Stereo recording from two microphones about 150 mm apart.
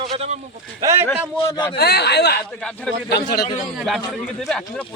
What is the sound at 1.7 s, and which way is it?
Speech, 90° left.